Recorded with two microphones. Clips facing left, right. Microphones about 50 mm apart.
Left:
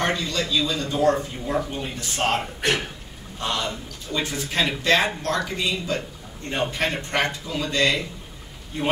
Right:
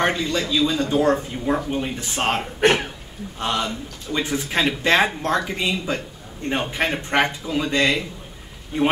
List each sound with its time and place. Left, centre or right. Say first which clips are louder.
0.0 s a man's voice: right 3 dB; right
2.6 s a man's voice: right 6 dB; right